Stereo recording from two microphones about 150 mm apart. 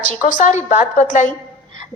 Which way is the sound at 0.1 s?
60° left (ahead or behind).